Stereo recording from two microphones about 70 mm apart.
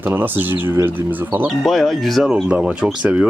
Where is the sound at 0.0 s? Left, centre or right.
Right.